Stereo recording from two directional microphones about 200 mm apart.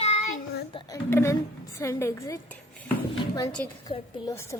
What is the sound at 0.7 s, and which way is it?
A woman's voice, 15° left (ahead or behind).